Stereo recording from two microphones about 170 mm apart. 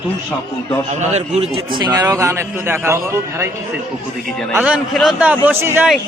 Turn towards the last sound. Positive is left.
turn(degrees=-15)  # may be behind; listen again after turning